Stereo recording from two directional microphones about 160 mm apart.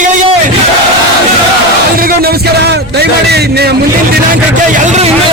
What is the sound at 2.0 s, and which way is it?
A man's voice, 70° right (ahead or behind).